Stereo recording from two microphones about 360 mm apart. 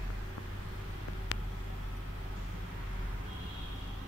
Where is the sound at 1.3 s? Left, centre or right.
Left.